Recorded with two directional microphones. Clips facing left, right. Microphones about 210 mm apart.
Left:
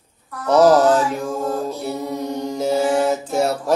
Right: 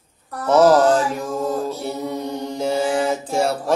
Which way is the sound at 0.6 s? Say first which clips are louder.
Left 1 dB; centre (ahead or behind).